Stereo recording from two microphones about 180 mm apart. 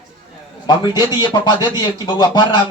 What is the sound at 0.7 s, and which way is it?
Speech, 20° left (ahead or behind).